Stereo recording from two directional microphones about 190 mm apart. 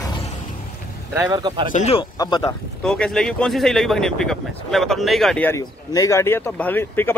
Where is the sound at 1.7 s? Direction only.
35° left (ahead or behind).